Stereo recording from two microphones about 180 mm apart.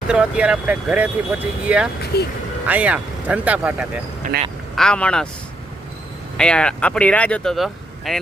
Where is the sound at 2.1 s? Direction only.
60° left (ahead or behind).